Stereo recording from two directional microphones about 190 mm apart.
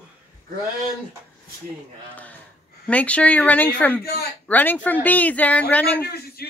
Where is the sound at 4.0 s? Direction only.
55° left (ahead or behind).